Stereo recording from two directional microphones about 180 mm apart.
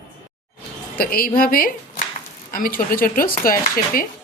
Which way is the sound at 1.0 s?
55° left (ahead or behind).